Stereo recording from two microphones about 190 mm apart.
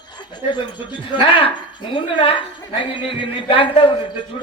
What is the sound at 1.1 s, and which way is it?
Speech, 25° left (ahead or behind).